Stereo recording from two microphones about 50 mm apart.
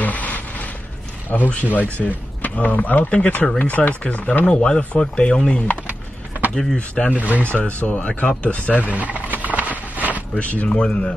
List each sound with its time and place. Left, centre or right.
0.0 s a sound: left
1.3 s speech: left
6.5 s speech: centre
7.2 s speech: right
7.4 s speech: left
8.9 s a sound: right
10.4 s speech: left
10.8 s speech: centre